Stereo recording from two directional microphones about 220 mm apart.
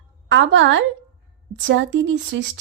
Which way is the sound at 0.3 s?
55° right (ahead or behind).